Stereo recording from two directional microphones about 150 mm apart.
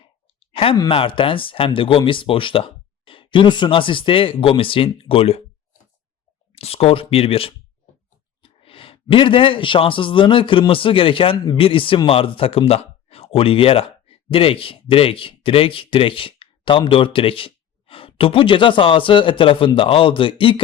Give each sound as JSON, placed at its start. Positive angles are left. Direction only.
{"t": 0.0, "sound": "a sound", "side_deg": 35}
{"t": 0.8, "sound": "speech", "side_deg": 35}
{"t": 6.5, "sound": "speech", "side_deg": 40}